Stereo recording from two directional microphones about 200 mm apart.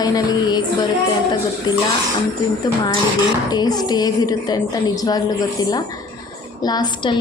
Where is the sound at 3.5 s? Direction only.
20° left (ahead or behind).